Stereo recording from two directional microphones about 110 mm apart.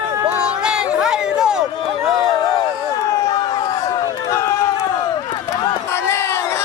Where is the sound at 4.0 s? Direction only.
25° left (ahead or behind).